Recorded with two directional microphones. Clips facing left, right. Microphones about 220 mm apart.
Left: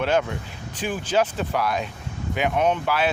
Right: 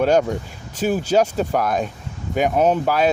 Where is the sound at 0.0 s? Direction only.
40° right (ahead or behind).